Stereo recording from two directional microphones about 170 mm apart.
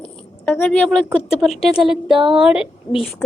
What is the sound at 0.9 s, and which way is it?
Speech, centre (ahead or behind).